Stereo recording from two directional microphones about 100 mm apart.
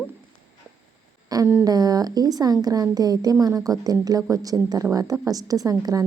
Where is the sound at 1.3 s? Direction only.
40° right (ahead or behind).